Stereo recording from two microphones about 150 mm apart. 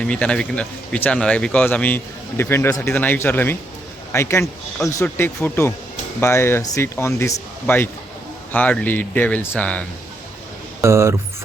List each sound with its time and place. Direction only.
0.0 s a man's voice: 5° left (ahead or behind)
10.8 s speech: 20° right (ahead or behind)